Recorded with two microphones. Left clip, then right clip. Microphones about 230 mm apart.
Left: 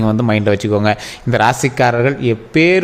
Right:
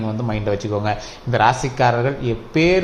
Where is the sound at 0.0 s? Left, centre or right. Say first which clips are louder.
Left 9 dB; left.